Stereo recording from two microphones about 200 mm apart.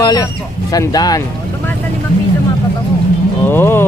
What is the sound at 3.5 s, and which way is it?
Speech, 10° left (ahead or behind).